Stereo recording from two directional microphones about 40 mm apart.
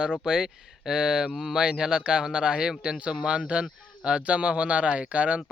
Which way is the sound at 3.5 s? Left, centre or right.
Right.